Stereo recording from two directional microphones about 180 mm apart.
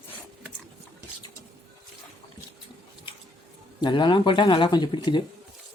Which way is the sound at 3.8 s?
25° left (ahead or behind).